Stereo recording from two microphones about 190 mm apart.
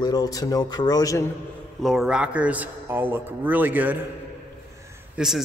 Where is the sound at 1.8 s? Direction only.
Centre (ahead or behind).